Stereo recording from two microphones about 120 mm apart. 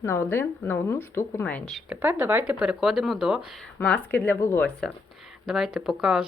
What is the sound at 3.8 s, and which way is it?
Speech, 15° left (ahead or behind).